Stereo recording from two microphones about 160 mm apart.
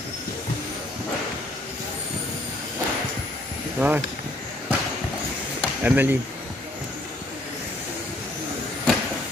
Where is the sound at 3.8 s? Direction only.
10° right (ahead or behind).